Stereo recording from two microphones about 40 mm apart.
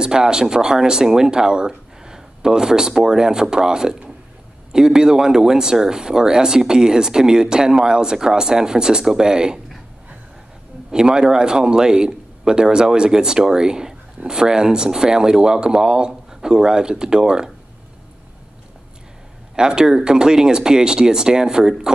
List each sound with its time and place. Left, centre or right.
0.0 s speech: centre
10.9 s a man's voice: centre
19.5 s speech: centre